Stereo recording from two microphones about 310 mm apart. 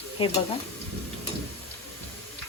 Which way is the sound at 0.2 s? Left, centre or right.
Centre.